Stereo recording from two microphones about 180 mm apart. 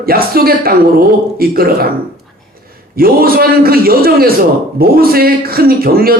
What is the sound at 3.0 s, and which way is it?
Speech, 55° right (ahead or behind).